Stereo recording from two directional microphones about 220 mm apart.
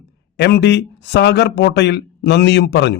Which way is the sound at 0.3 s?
50° left (ahead or behind).